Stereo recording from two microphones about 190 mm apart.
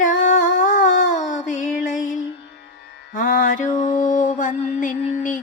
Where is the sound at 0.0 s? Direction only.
40° left (ahead or behind).